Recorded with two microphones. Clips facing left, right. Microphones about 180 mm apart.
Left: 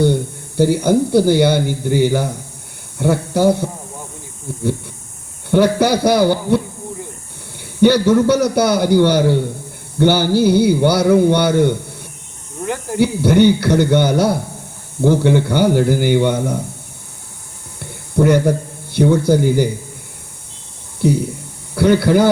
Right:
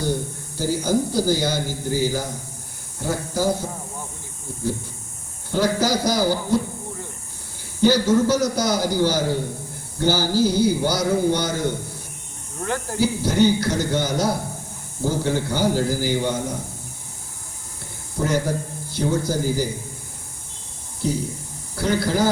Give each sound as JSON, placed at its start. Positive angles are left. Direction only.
{"t": 0.0, "sound": "a man's voice", "side_deg": 65}
{"t": 5.5, "sound": "a man's voice", "side_deg": 65}
{"t": 7.8, "sound": "a man's voice", "side_deg": 65}
{"t": 13.0, "sound": "a man's voice", "side_deg": 65}
{"t": 17.7, "sound": "a sound", "side_deg": 65}
{"t": 21.0, "sound": "a man's voice", "side_deg": 65}